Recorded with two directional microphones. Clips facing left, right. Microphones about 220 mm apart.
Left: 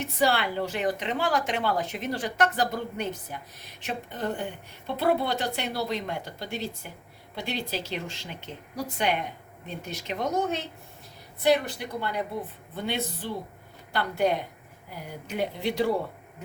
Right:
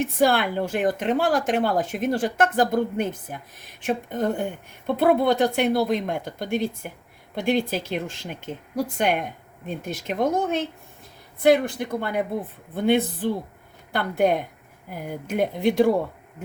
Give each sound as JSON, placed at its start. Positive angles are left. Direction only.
{"t": 0.0, "sound": "a woman's voice", "side_deg": -50}